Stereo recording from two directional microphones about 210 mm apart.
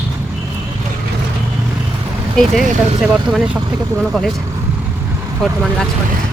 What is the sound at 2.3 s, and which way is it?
Speech, centre (ahead or behind).